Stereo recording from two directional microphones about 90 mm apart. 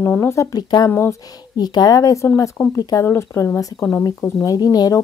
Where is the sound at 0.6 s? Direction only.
50° left (ahead or behind).